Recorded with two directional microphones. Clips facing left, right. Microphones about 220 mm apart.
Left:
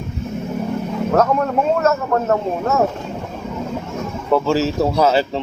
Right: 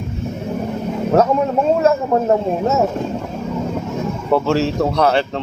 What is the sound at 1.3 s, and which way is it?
A man's voice, 10° right (ahead or behind).